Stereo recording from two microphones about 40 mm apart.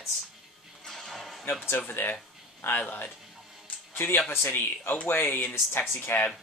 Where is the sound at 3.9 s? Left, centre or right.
Left.